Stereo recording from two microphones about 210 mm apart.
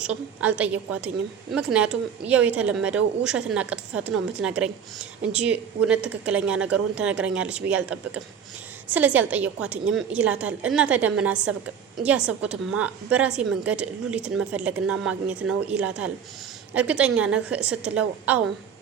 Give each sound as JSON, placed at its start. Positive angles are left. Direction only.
{"t": 0.0, "sound": "a woman's voice", "side_deg": -5}